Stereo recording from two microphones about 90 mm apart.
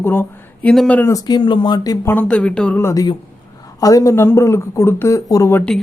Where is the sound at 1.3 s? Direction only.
55° left (ahead or behind).